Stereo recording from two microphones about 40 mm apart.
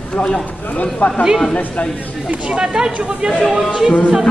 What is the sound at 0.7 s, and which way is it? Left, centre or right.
Speech, left.